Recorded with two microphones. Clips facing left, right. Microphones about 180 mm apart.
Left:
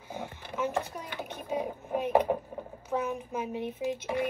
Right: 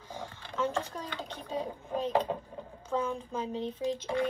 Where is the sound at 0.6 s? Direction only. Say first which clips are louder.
Left 1 dB; 20° left (ahead or behind).